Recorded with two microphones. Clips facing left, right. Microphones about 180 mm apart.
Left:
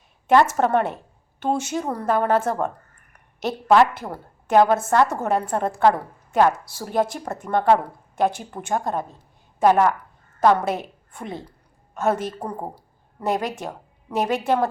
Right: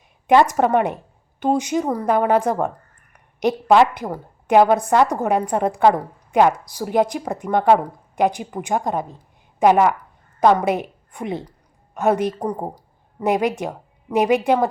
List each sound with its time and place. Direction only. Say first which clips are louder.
0.3 s a woman's voice: right 2 dB; 15° right (ahead or behind)